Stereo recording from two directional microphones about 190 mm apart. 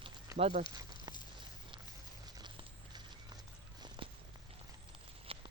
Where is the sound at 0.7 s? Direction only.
20° right (ahead or behind).